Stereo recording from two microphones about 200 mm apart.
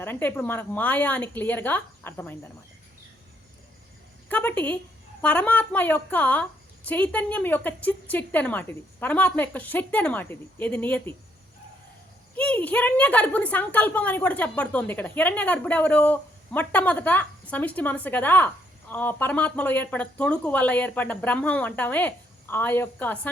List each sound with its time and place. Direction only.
0.0 s a woman's voice: 10° left (ahead or behind)
4.3 s a woman's voice: 10° left (ahead or behind)
12.4 s a woman's voice: 5° left (ahead or behind)